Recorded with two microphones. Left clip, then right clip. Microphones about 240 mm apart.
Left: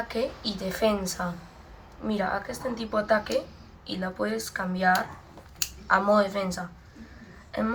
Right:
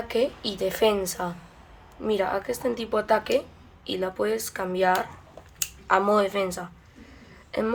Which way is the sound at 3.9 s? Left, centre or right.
Right.